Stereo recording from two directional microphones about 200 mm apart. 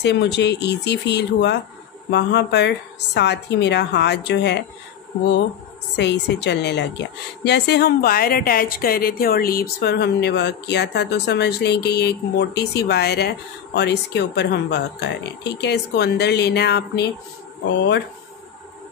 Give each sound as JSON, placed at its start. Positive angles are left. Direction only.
{"t": 0.0, "sound": "a woman's voice", "side_deg": 60}
{"t": 5.9, "sound": "a woman's voice", "side_deg": 60}